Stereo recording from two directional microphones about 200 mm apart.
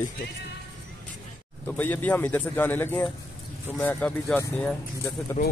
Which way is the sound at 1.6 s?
10° left (ahead or behind).